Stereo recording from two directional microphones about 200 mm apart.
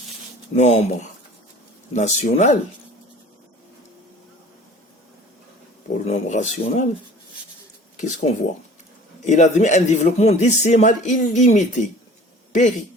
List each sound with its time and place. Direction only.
0.5 s a man's voice: 30° left (ahead or behind)
6.1 s a man's voice: 35° left (ahead or behind)
8.0 s a man's voice: 35° left (ahead or behind)